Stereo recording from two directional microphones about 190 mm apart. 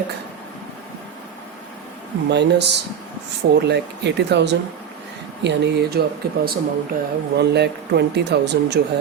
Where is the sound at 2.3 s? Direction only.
65° right (ahead or behind).